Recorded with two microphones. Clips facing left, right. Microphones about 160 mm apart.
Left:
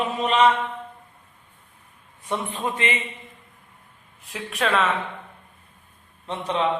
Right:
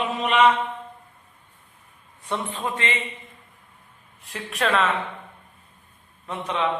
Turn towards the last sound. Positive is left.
turn(degrees=30)  # may be behind; listen again after turning